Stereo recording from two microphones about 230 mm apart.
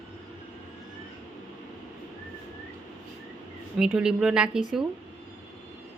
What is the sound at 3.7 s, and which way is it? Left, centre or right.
A woman's voice, centre.